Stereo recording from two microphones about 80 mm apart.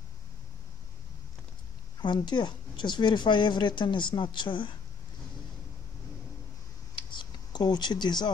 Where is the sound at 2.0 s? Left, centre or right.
Left.